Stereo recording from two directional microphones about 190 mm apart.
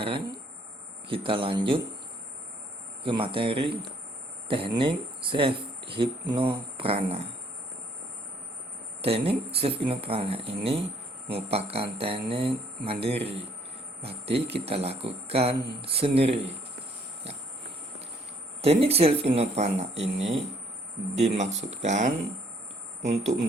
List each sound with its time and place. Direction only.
0.0 s a man's voice: 30° right (ahead or behind)
3.0 s a man's voice: 25° right (ahead or behind)
9.0 s speech: 30° right (ahead or behind)
14.3 s speech: 60° right (ahead or behind)
14.6 s speech: 30° right (ahead or behind)
18.6 s speech: 30° right (ahead or behind)